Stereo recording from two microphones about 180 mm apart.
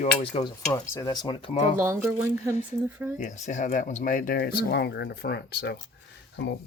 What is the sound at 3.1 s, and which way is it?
Speech, 40° left (ahead or behind).